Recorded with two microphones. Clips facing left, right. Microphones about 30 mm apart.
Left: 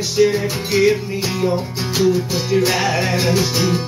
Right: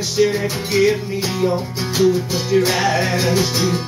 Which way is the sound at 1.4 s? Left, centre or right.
Centre.